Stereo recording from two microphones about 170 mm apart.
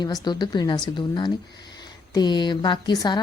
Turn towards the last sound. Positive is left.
turn(degrees=25)  # may be behind; listen again after turning